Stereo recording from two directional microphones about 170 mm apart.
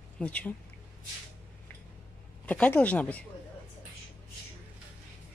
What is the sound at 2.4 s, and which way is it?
Speech, 10° left (ahead or behind).